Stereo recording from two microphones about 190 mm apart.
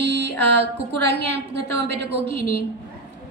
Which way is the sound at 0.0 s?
65° right (ahead or behind).